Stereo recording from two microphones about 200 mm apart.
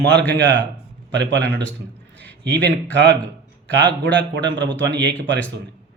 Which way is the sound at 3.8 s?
5° left (ahead or behind).